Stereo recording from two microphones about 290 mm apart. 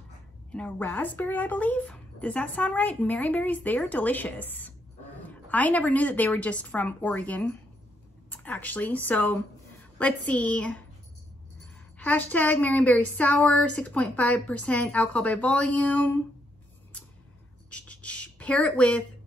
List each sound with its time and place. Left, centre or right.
0.5 s a woman's voice: centre
12.0 s speech: centre
17.6 s a sound: centre